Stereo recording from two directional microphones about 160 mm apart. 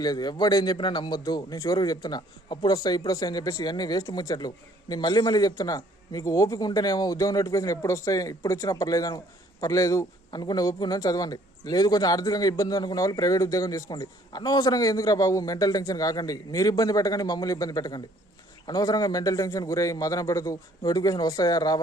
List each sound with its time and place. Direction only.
0.0 s a man's voice: 25° left (ahead or behind)